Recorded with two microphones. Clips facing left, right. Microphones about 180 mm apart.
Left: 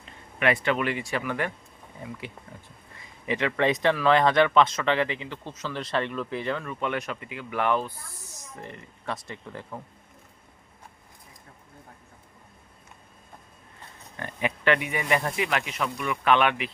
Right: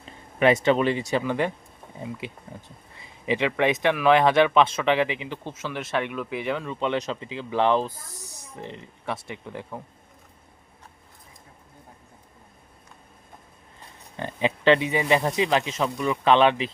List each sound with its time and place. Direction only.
0.3 s speech: 30° right (ahead or behind); by 9.8 s 10° right (ahead or behind)
14.2 s speech: 25° right (ahead or behind)